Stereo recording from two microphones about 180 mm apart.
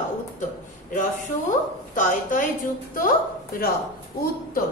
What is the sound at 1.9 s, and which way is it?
A woman's voice, 45° left (ahead or behind).